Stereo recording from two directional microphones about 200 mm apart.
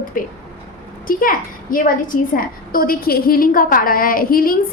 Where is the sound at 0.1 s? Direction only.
45° left (ahead or behind).